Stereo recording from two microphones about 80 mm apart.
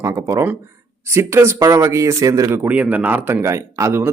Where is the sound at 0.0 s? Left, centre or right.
Right.